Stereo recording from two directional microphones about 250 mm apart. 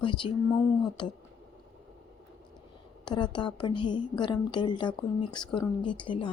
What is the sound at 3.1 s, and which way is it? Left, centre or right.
A woman's voice, centre.